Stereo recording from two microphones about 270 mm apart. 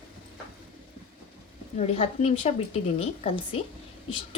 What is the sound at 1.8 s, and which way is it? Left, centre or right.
A woman's voice, left.